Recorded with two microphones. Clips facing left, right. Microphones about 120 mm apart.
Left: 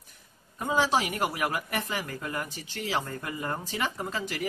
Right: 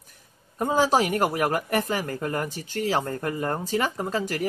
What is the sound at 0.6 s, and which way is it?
Speech, 40° right (ahead or behind).